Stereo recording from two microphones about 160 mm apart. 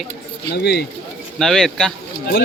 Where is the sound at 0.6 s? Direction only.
90° left.